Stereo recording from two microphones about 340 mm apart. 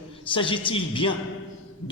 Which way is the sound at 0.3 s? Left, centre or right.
Centre.